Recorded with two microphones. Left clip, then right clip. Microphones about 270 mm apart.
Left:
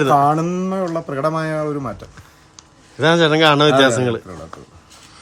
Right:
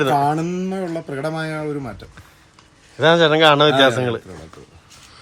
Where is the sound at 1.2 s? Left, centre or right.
Left.